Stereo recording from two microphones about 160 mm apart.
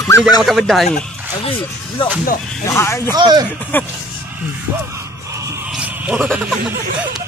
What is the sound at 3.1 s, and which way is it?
Speech, 25° right (ahead or behind).